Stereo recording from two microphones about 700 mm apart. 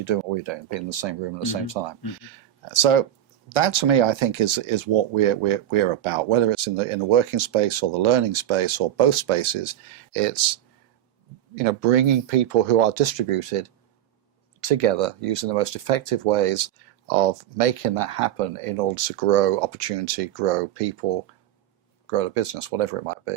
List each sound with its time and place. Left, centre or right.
0.0 s speech: right